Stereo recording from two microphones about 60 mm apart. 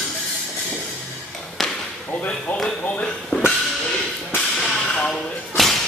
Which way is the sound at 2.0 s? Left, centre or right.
Left.